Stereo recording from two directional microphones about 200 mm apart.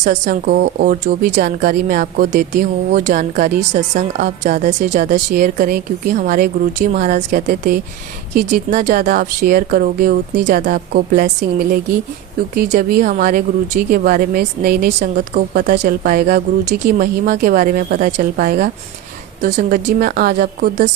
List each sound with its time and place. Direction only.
0.0 s speech: 45° right (ahead or behind)
5.0 s speech: 55° right (ahead or behind)